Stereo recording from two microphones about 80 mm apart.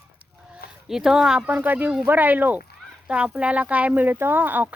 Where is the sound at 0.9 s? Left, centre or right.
Centre.